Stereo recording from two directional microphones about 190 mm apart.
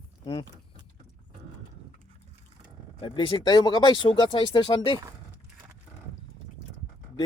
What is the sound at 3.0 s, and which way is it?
Speech, 25° left (ahead or behind).